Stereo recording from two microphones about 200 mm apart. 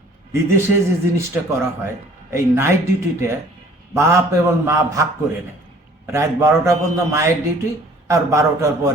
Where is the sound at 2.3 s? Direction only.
15° right (ahead or behind).